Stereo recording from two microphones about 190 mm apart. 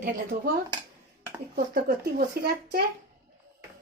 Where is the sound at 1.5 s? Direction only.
55° right (ahead or behind).